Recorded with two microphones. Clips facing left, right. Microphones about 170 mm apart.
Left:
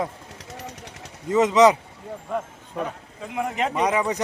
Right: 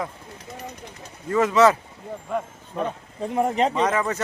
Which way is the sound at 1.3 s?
20° left (ahead or behind).